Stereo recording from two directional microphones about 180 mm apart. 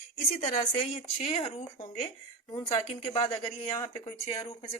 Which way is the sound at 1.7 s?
20° left (ahead or behind).